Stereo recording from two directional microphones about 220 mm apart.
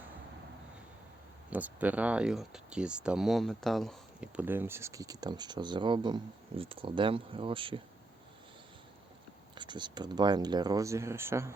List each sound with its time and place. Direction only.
1.5 s speech: 5° right (ahead or behind); by 7.8 s 25° right (ahead or behind)
9.6 s speech: 20° right (ahead or behind)